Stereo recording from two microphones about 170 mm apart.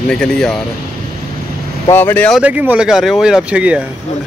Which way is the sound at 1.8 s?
15° left (ahead or behind).